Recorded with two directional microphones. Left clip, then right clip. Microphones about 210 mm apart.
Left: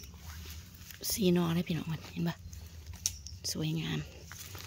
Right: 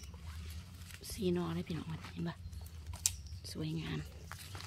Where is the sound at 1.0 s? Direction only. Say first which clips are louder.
Left 7 dB; 50° left (ahead or behind).